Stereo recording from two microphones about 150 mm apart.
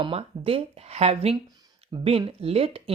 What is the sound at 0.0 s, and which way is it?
Speech, 40° right (ahead or behind).